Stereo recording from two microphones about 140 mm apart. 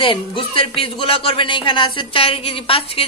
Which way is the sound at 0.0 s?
40° left (ahead or behind).